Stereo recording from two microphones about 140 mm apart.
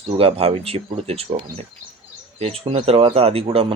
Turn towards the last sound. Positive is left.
turn(degrees=-45)  # may be behind; listen again after turning